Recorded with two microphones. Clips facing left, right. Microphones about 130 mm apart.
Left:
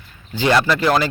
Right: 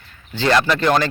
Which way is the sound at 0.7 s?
Centre (ahead or behind).